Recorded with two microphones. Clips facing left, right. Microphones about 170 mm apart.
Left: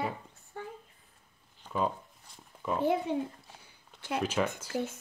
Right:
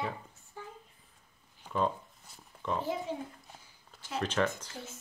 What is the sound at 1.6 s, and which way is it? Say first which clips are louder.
Speech: even; 10° right (ahead or behind).